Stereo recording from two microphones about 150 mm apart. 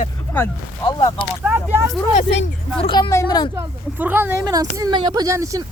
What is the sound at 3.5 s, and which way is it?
Speech, 15° right (ahead or behind).